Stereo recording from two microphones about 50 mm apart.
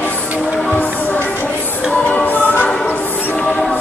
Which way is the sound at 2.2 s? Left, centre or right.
Left.